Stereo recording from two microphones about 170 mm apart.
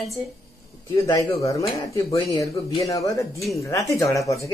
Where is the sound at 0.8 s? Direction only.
20° left (ahead or behind).